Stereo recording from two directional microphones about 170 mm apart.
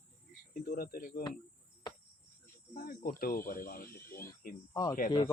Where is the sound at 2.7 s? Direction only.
55° left (ahead or behind).